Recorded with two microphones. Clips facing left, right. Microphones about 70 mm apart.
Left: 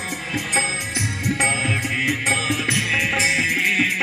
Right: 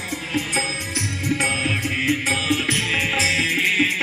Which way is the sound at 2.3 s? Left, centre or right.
Left.